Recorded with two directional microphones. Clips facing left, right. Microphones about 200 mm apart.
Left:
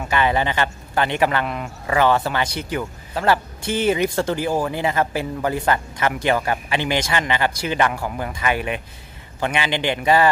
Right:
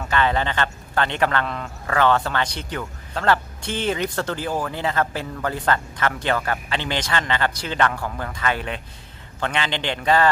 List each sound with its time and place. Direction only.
0.0 s a man's voice: 10° left (ahead or behind)